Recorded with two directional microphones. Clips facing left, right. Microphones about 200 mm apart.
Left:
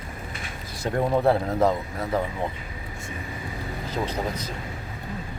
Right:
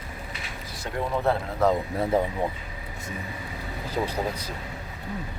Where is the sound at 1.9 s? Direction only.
30° right (ahead or behind).